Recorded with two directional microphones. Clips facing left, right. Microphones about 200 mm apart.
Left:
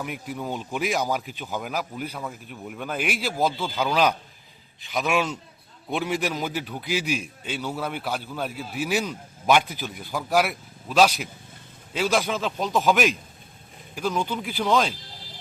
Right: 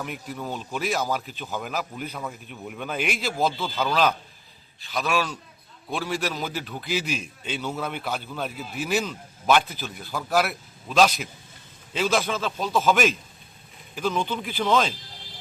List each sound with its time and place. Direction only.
0.0 s a man's voice: 10° left (ahead or behind)